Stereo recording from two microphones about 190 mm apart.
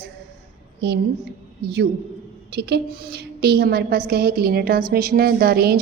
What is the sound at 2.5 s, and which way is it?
A woman's voice, 60° right (ahead or behind).